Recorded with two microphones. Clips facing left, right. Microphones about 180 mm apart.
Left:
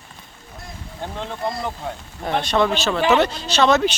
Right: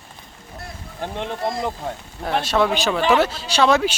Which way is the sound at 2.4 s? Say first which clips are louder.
Even; 5° right (ahead or behind).